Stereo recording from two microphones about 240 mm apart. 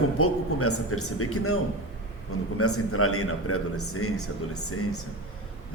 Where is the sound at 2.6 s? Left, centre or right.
Left.